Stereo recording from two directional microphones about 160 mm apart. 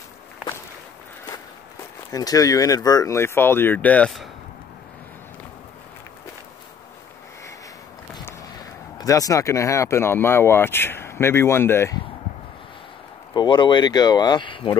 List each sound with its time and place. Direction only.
2.1 s speech: 20° left (ahead or behind); by 4.3 s 5° left (ahead or behind)
8.3 s speech: 25° left (ahead or behind)
13.3 s speech: 25° left (ahead or behind)